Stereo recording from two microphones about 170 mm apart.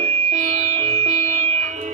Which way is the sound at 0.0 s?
40° right (ahead or behind).